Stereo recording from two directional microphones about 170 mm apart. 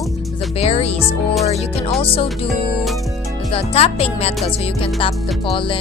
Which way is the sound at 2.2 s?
Centre (ahead or behind).